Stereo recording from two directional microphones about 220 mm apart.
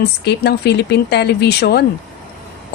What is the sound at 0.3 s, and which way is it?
A woman's voice, 50° left (ahead or behind).